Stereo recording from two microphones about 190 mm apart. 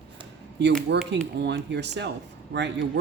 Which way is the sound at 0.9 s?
65° right (ahead or behind).